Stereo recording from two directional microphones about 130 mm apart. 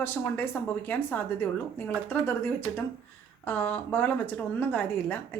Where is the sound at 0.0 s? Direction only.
15° left (ahead or behind).